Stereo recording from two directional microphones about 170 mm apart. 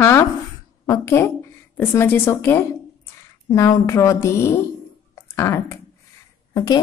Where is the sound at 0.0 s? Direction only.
15° left (ahead or behind).